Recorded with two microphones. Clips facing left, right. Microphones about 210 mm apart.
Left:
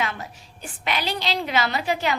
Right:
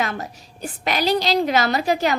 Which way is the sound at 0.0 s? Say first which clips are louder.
Right 3 dB; 40° right (ahead or behind).